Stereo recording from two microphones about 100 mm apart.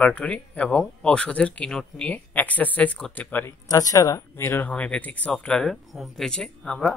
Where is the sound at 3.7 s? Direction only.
35° left (ahead or behind).